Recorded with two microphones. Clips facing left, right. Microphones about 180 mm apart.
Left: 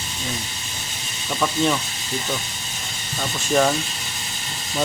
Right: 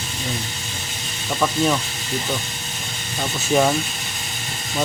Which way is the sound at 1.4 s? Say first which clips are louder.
Right 1 dB; 5° right (ahead or behind).